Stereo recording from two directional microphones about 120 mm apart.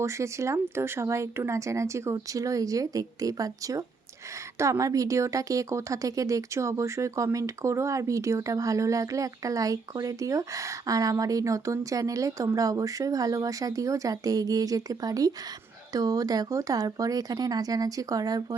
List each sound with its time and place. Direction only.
0.0 s a woman's voice: 25° right (ahead or behind)